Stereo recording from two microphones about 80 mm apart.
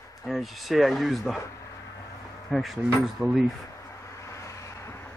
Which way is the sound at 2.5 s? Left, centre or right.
Centre.